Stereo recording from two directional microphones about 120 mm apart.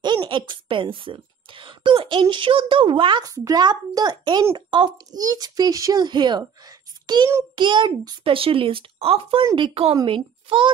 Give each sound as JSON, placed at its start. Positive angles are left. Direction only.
{"t": 0.0, "sound": "a child's voice", "side_deg": -40}
{"t": 8.2, "sound": "speech", "side_deg": -50}